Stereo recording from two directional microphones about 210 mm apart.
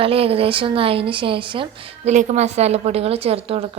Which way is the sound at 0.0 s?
25° right (ahead or behind).